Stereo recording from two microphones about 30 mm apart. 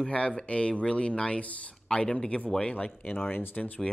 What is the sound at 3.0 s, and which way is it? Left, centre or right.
Speech, left.